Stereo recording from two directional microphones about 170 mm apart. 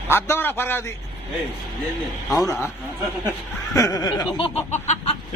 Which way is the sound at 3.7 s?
20° left (ahead or behind).